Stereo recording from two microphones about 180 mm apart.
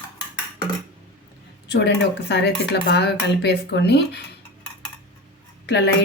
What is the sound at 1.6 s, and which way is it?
Speech, 70° left (ahead or behind).